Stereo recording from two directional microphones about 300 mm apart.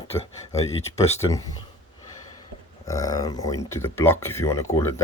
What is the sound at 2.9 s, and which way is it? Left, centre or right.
Speech, centre.